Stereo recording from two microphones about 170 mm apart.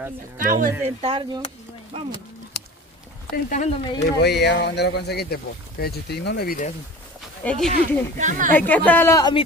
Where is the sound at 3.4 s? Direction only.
45° left (ahead or behind).